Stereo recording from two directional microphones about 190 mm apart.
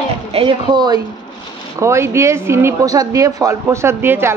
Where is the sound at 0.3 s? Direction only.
30° right (ahead or behind).